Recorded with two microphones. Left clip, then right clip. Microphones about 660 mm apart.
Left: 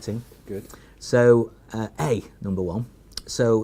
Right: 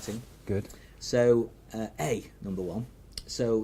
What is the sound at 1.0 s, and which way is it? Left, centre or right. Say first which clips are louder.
Speech: left 7 dB; left.